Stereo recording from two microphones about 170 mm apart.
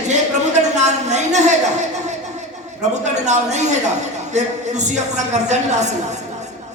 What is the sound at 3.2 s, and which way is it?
A woman's voice, 45° right (ahead or behind).